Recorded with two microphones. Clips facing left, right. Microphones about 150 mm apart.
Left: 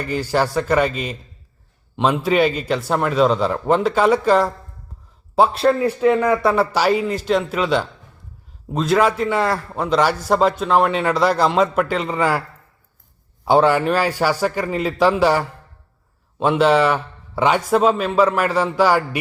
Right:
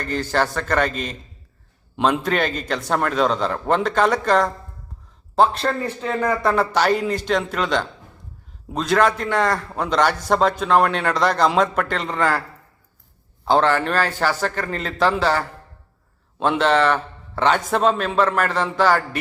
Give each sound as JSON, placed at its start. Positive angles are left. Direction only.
{"t": 0.0, "sound": "a man's voice", "side_deg": 10}
{"t": 13.4, "sound": "a man's voice", "side_deg": 10}